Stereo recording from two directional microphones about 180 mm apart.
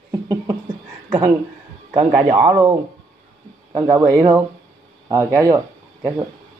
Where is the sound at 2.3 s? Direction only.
30° right (ahead or behind).